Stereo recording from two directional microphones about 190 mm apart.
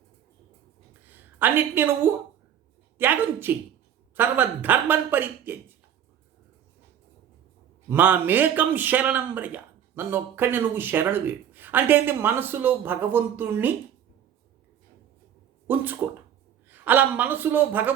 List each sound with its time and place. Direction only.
1.1 s a woman's voice: 10° right (ahead or behind)
7.9 s a man's voice: 10° right (ahead or behind)
15.6 s a man's voice: 10° right (ahead or behind)